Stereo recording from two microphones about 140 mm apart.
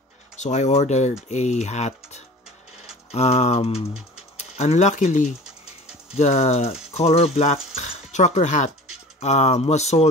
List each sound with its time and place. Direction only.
0.4 s speech: 60° left (ahead or behind)